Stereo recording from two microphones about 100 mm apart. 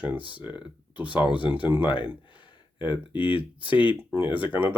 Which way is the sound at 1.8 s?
55° left (ahead or behind).